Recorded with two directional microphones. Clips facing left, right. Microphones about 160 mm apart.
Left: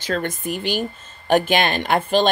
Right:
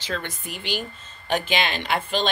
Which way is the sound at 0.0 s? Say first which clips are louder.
Left 7 dB; 50° left (ahead or behind).